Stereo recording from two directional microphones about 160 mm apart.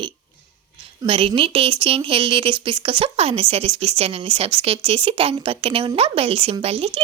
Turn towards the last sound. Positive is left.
turn(degrees=-40)  # may be behind; listen again after turning